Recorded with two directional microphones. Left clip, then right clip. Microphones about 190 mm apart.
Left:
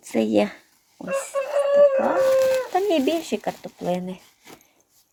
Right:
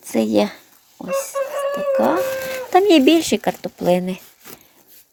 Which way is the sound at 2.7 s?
35° right (ahead or behind).